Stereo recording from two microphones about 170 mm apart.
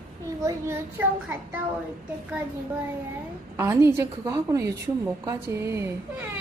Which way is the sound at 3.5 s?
15° right (ahead or behind).